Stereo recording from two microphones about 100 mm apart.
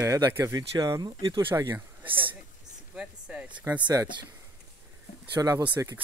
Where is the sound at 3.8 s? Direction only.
35° right (ahead or behind).